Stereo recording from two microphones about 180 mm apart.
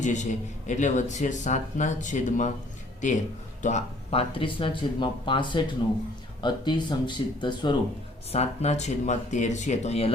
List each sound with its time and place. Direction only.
0.0 s a man's voice: 40° left (ahead or behind); by 7.8 s 25° left (ahead or behind)
8.3 s speech: 35° left (ahead or behind)